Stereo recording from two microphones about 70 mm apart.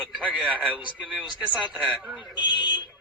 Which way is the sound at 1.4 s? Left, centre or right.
Centre.